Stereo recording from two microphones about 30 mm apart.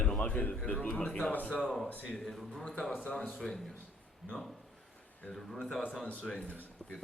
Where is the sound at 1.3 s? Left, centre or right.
Left.